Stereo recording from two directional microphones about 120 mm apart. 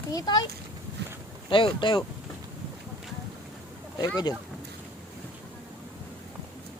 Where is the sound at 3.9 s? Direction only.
35° left (ahead or behind).